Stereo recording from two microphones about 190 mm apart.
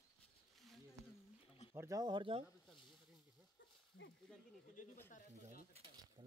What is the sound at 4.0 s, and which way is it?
Speech, 75° left (ahead or behind).